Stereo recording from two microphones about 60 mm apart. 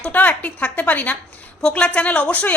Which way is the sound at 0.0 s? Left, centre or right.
Left.